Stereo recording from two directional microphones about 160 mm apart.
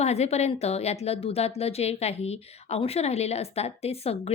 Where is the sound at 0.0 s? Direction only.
40° left (ahead or behind).